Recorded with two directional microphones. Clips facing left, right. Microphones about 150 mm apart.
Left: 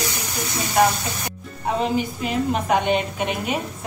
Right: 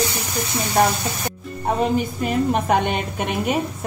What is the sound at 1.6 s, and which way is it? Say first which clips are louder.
A woman's voice: right 2 dB; 45° right (ahead or behind).